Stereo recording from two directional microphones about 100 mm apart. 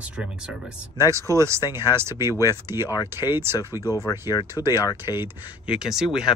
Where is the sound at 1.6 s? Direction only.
45° left (ahead or behind).